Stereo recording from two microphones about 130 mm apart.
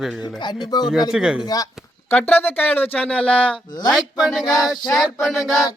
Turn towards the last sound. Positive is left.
turn(degrees=0)  # may be behind; listen again after turning